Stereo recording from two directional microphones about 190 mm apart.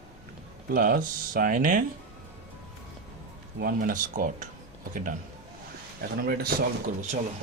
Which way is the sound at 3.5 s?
45° right (ahead or behind).